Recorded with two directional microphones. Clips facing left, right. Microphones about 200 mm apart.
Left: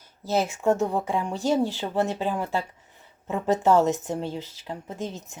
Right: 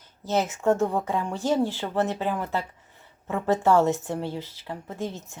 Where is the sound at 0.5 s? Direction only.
15° left (ahead or behind).